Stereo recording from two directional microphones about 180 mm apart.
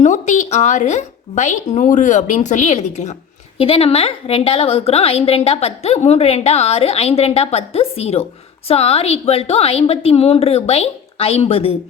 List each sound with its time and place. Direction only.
0.0 s a woman's voice: 40° left (ahead or behind)